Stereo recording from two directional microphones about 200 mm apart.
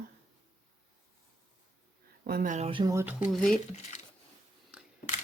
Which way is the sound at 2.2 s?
45° right (ahead or behind).